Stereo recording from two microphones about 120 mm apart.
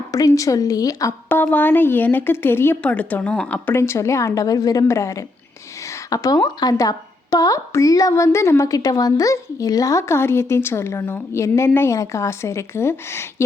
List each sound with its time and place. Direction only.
0.1 s a woman's voice: 30° left (ahead or behind)
1.3 s speech: 15° left (ahead or behind)
3.8 s a woman's voice: 25° left (ahead or behind)